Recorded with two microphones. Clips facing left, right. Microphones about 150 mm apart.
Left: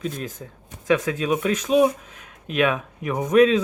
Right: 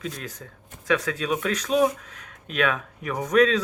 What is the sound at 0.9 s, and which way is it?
Speech, 20° left (ahead or behind).